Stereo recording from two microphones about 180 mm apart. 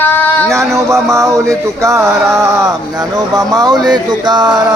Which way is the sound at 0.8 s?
15° right (ahead or behind).